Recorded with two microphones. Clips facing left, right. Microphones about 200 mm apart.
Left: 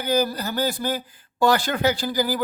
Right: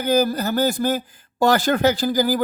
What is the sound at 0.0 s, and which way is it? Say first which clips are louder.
Speech: right 4 dB; 50° right (ahead or behind).